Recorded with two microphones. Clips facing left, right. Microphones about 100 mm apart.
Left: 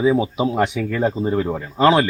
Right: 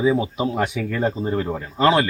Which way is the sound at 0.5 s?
Centre (ahead or behind).